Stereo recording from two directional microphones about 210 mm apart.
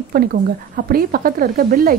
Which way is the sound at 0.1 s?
45° right (ahead or behind).